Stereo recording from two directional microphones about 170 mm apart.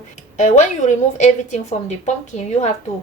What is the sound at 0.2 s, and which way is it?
A woman's voice, 45° left (ahead or behind).